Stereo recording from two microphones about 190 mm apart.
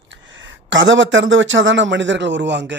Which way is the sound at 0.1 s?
75° right (ahead or behind).